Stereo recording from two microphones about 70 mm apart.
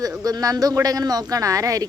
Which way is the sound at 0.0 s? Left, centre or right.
Right.